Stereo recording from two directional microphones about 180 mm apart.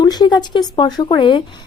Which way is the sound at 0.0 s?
20° left (ahead or behind).